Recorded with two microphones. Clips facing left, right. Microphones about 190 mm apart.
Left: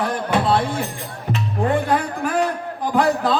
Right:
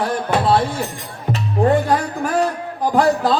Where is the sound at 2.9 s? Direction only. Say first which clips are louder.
Right 2 dB; 35° right (ahead or behind).